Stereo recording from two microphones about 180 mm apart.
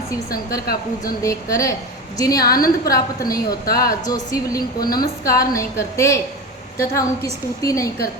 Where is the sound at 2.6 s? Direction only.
55° left (ahead or behind).